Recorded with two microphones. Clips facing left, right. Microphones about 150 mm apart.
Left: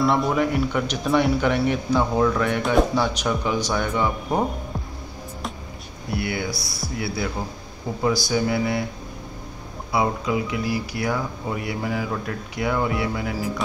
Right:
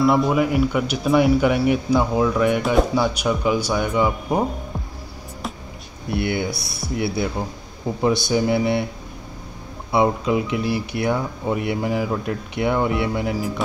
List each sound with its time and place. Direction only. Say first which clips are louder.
0.0 s speech: right 3 dB; centre (ahead or behind)
6.1 s speech: right 4 dB; 25° right (ahead or behind)
9.9 s speech: right 4 dB; 20° right (ahead or behind)